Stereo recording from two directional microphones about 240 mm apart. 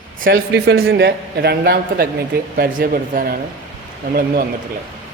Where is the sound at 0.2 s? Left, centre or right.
Right.